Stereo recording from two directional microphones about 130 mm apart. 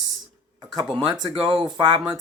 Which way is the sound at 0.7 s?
35° right (ahead or behind).